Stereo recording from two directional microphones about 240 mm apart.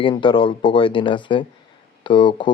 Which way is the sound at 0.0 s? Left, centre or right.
Left.